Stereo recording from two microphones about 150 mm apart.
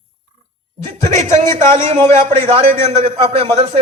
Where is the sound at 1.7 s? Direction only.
40° right (ahead or behind).